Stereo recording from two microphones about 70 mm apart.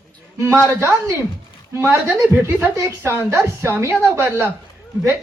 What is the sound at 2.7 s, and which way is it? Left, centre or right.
A woman's voice, right.